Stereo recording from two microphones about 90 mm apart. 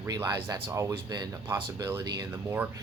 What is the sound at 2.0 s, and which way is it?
Speech, 45° right (ahead or behind).